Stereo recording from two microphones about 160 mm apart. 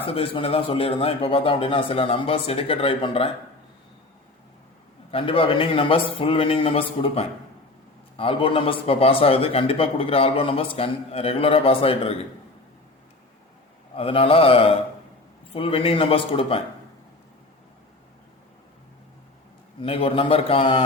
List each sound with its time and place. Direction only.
0.0 s a man's voice: 35° left (ahead or behind)
5.1 s a man's voice: 35° left (ahead or behind)
13.9 s a man's voice: 35° left (ahead or behind)
19.8 s a man's voice: 35° left (ahead or behind)